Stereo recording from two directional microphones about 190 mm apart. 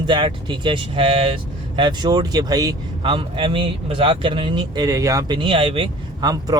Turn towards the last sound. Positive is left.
turn(degrees=-20)  # may be behind; listen again after turning